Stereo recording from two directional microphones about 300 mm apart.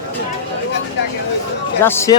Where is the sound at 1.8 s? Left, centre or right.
Centre.